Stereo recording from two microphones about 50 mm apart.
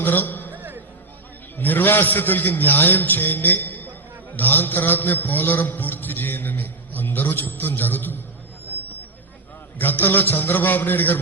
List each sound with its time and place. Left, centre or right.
0.0 s a sound: left
0.5 s music: right
1.5 s a man's voice: left
9.7 s a man's voice: left